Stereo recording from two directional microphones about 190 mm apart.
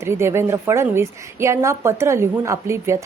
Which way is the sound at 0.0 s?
15° right (ahead or behind).